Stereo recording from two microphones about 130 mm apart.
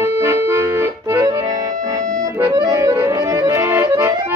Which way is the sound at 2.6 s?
25° right (ahead or behind).